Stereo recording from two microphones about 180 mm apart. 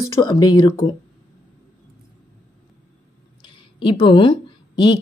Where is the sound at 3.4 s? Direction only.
30° left (ahead or behind).